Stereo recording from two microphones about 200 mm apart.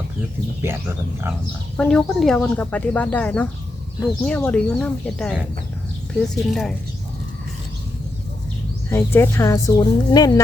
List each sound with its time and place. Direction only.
0.6 s speech: 10° right (ahead or behind)
1.7 s speech: 5° left (ahead or behind)
8.9 s speech: 10° left (ahead or behind)